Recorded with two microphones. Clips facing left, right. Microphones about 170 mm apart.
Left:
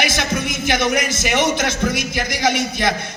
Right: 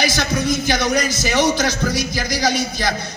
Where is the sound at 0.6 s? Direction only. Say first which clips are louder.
Even; 25° left (ahead or behind).